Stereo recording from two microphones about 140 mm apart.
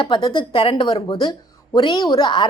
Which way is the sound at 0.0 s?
35° left (ahead or behind).